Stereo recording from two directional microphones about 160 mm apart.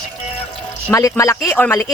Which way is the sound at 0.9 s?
20° left (ahead or behind).